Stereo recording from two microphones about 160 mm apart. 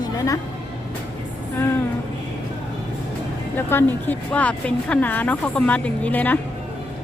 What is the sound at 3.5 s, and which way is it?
Speech, 15° left (ahead or behind).